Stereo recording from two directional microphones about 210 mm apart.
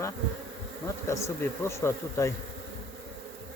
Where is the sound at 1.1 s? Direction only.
15° left (ahead or behind).